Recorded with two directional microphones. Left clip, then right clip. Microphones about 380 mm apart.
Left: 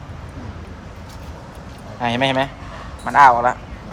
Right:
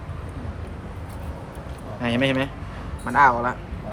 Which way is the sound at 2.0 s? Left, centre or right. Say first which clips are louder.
Left 5 dB; centre.